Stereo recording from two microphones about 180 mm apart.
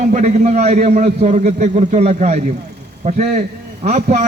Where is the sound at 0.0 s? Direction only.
40° right (ahead or behind).